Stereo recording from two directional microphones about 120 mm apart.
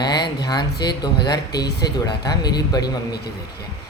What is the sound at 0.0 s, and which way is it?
Speech, 35° left (ahead or behind).